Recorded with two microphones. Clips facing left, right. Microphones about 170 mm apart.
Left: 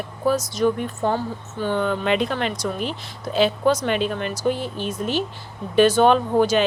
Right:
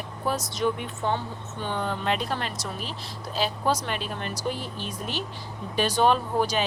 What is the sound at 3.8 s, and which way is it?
Speech, 60° left (ahead or behind).